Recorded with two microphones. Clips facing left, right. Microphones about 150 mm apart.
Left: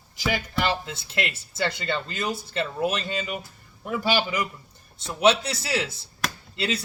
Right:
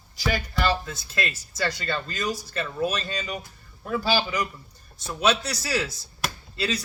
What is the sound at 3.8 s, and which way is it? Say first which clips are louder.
A man's voice: even; 20° left (ahead or behind).